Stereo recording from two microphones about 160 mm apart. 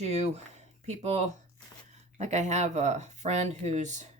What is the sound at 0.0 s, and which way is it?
Speech, 45° right (ahead or behind).